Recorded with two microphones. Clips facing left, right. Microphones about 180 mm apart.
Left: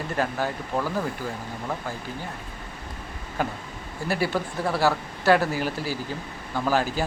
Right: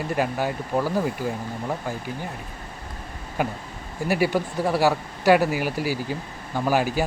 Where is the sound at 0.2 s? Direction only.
15° right (ahead or behind).